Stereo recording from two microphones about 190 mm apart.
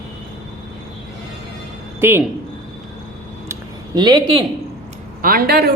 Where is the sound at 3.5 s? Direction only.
20° right (ahead or behind).